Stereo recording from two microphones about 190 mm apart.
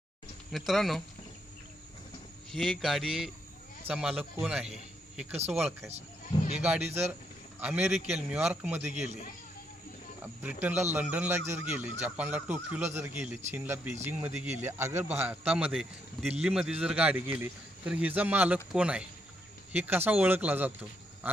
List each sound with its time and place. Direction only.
0.5 s a man's voice: centre (ahead or behind)
2.5 s a man's voice: centre (ahead or behind)
6.3 s speech: 20° left (ahead or behind)
7.6 s a man's voice: 5° right (ahead or behind)
10.4 s a man's voice: 10° right (ahead or behind)